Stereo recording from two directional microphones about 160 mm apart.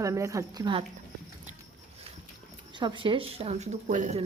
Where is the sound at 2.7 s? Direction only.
30° right (ahead or behind); by 4.2 s 50° right (ahead or behind).